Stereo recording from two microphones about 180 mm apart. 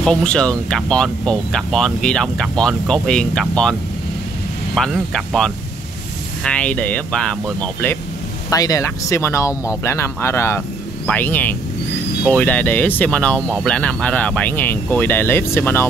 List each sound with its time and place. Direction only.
0.0 s speech: 5° left (ahead or behind)
4.7 s speech: centre (ahead or behind)
8.5 s speech: 20° left (ahead or behind)